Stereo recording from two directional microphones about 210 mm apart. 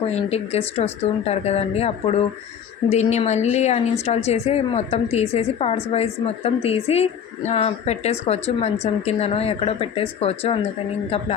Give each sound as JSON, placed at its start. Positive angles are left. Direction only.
{"t": 0.1, "sound": "speech", "side_deg": 30}